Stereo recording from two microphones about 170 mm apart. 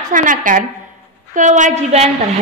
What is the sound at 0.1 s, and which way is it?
Speech, 50° right (ahead or behind).